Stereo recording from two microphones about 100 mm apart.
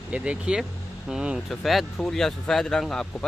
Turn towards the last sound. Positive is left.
turn(degrees=5)  # may be behind; listen again after turning